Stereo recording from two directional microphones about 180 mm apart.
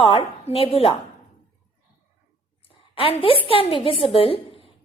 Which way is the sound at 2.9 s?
30° left (ahead or behind).